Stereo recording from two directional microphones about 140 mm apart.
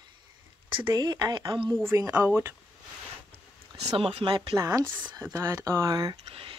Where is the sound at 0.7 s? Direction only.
30° right (ahead or behind).